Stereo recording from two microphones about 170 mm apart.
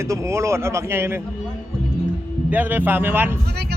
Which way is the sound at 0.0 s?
15° right (ahead or behind).